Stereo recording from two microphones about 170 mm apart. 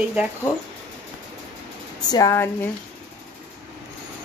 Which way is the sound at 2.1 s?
20° left (ahead or behind).